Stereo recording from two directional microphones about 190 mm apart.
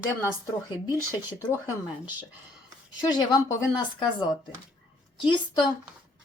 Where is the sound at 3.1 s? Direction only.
20° left (ahead or behind).